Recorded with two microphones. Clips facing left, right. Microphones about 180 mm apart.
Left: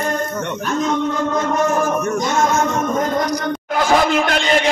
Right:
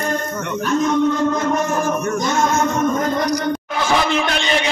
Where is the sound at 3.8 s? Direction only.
50° left (ahead or behind).